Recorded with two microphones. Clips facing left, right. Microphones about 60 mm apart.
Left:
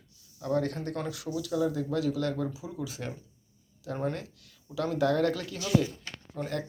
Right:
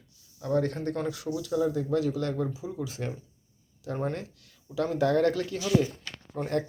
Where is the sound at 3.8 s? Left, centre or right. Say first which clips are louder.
Right 1 dB; right.